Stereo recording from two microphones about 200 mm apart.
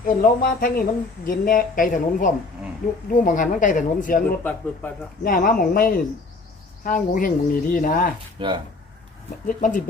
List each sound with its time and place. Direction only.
0.0 s speech: 45° left (ahead or behind)
5.2 s speech: 45° left (ahead or behind)
8.4 s speech: 25° right (ahead or behind)
9.5 s speech: 40° left (ahead or behind)